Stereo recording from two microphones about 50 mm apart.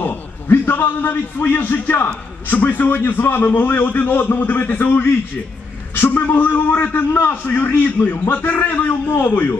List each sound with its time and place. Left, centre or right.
0.0 s a man's voice: left